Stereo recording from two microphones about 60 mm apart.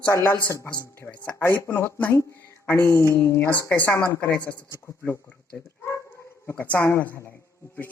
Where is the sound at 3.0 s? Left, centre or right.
Left.